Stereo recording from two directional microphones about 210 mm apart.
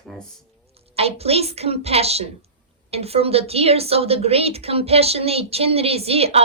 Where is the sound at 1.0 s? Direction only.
30° right (ahead or behind).